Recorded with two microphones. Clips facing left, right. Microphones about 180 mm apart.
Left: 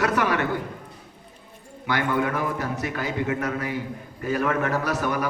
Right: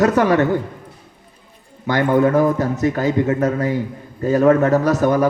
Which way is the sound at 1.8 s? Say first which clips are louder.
Right 9 dB; 40° right (ahead or behind).